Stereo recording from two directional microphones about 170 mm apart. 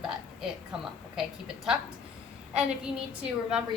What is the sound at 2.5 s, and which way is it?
A woman's voice, 5° right (ahead or behind).